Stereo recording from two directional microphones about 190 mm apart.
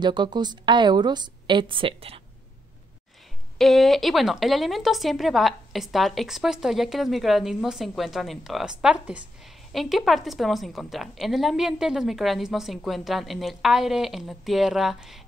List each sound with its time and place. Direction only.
0.0 s a woman's voice: 25° right (ahead or behind)
3.5 s speech: centre (ahead or behind)